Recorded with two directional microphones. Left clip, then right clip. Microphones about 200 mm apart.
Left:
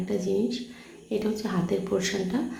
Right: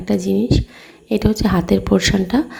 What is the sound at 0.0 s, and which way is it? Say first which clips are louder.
Speech: right 7 dB; 45° right (ahead or behind).